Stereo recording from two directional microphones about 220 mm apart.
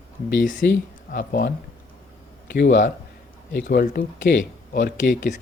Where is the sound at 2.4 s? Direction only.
50° left (ahead or behind).